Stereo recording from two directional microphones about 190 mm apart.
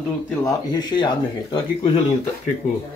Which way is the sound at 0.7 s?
20° left (ahead or behind).